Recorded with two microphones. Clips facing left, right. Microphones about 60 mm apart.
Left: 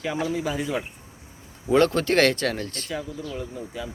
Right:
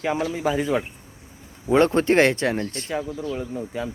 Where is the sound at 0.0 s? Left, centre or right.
Right.